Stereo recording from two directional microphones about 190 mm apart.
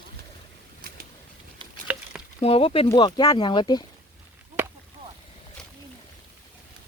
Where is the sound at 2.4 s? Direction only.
30° left (ahead or behind).